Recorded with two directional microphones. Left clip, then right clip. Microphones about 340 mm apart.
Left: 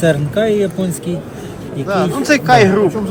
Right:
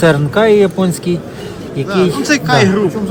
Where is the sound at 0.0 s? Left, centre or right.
Right.